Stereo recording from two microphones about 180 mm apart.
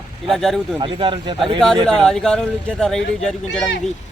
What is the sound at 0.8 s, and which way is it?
Speech, 30° right (ahead or behind).